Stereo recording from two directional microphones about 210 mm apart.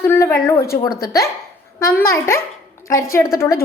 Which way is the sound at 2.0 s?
15° left (ahead or behind).